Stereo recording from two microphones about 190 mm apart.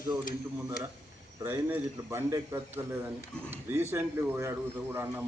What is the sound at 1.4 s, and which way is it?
Speech, 15° right (ahead or behind).